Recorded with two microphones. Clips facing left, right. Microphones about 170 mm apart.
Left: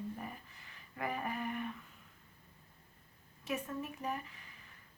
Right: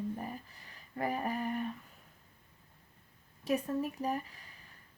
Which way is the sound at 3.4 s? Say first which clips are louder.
Right 7 dB; 35° right (ahead or behind).